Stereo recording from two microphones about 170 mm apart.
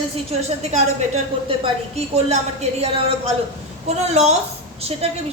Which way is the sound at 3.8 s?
40° right (ahead or behind).